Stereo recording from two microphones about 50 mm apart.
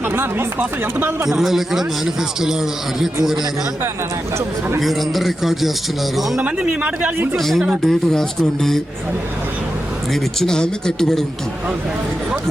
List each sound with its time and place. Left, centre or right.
0.1 s speech: right
1.3 s a man's voice: centre
4.8 s a man's voice: centre
10.4 s speech: centre